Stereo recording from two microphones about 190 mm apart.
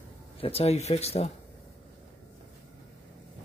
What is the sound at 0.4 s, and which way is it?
Speech, 30° left (ahead or behind).